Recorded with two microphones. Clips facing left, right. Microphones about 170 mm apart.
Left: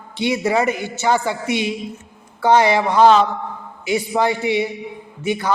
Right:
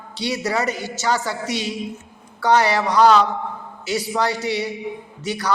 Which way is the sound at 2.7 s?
15° left (ahead or behind).